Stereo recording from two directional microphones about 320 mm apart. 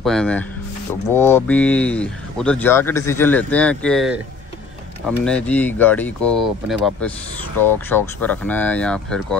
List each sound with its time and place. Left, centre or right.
0.0 s speech: centre
7.6 s speech: centre